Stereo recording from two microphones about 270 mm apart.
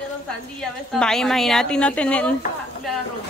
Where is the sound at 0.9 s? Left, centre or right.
Centre.